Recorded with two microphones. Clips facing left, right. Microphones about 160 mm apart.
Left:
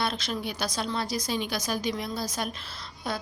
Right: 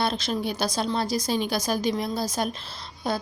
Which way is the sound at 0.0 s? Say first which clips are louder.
Right 4 dB; 30° right (ahead or behind).